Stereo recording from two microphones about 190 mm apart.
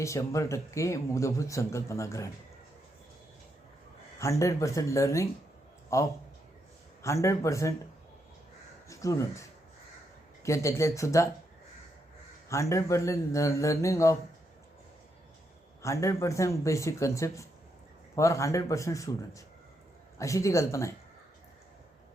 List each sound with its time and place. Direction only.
0.0 s a man's voice: 15° left (ahead or behind)
4.2 s a man's voice: 15° left (ahead or behind)
8.9 s speech: 15° left (ahead or behind)
10.4 s a man's voice: 15° left (ahead or behind)
12.5 s a man's voice: 15° left (ahead or behind)
15.8 s a man's voice: 15° left (ahead or behind)